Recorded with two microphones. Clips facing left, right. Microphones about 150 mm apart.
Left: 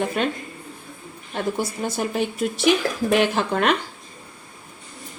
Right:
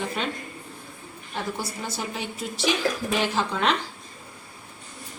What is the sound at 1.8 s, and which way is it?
A woman's voice, 55° left (ahead or behind).